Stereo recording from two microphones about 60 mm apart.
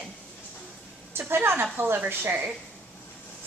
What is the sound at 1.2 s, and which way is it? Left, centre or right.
A woman's voice, right.